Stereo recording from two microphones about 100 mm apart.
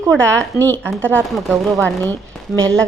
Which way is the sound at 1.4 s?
Centre (ahead or behind).